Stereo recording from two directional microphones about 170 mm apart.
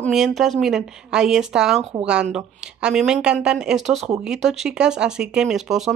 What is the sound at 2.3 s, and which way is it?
Speech, 5° right (ahead or behind).